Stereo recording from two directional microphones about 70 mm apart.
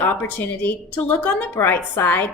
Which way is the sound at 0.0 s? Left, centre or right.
Left.